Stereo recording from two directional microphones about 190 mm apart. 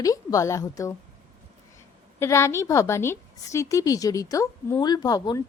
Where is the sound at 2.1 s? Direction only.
15° left (ahead or behind).